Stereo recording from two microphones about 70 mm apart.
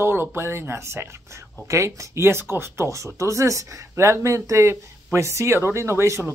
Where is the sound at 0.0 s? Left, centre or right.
Right.